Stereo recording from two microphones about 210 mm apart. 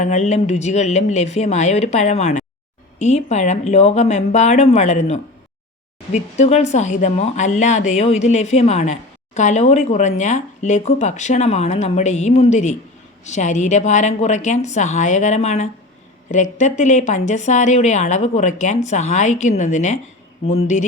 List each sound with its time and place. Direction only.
0.0 s speech: 35° left (ahead or behind)